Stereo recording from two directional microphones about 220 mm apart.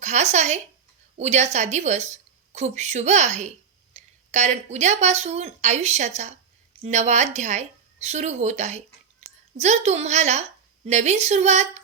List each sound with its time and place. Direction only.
0.0 s speech: 30° right (ahead or behind)